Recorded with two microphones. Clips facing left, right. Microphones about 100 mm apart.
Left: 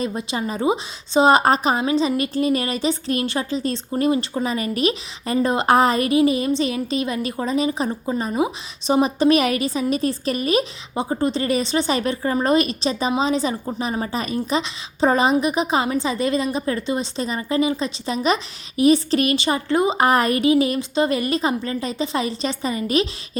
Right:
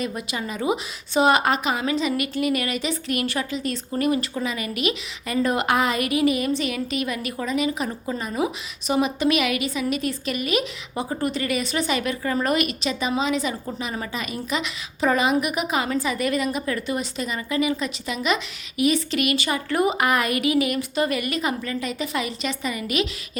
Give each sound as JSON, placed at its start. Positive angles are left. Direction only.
{"t": 0.0, "sound": "a woman's voice", "side_deg": 30}